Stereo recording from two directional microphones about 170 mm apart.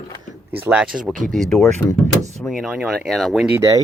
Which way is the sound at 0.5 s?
10° right (ahead or behind).